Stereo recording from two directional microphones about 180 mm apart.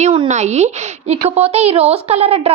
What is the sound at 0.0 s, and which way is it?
A woman's voice, 35° right (ahead or behind).